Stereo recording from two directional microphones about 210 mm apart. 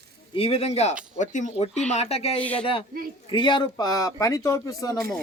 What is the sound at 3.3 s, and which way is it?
Speech, 20° left (ahead or behind).